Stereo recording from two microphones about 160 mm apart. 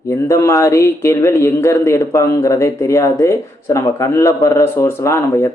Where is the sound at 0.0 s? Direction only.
20° left (ahead or behind).